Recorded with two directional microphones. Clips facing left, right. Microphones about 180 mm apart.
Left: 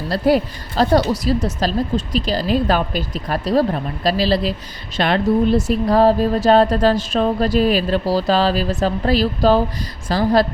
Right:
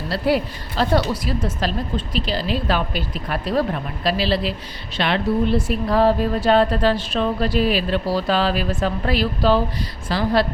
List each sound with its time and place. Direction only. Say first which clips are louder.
0.1 s a woman's voice: left 4 dB; 40° left (ahead or behind)